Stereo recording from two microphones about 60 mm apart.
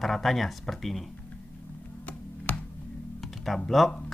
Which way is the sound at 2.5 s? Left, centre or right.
Left.